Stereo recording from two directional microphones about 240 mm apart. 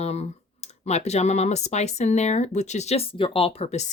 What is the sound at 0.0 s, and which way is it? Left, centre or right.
Clicking, left.